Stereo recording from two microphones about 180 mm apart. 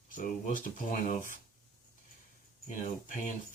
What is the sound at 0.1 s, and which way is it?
Speech, 50° left (ahead or behind).